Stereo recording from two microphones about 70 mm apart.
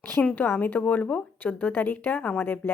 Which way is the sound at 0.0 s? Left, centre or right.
Left.